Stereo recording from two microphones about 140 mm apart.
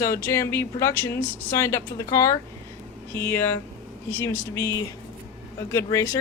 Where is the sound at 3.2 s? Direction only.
15° left (ahead or behind).